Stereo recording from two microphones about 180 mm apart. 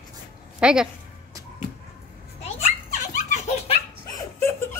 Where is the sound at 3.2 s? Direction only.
40° left (ahead or behind).